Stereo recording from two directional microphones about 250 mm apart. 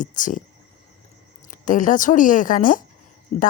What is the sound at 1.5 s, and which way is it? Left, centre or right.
Speech, left.